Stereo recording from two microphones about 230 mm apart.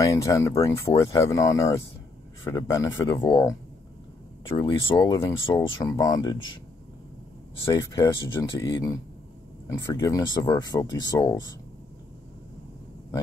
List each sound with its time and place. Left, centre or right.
0.0 s speech: centre
4.6 s speech: centre
7.7 s speech: centre